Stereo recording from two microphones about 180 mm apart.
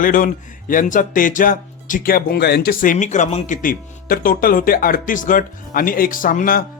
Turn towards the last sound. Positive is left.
turn(degrees=50)  # may be behind; listen again after turning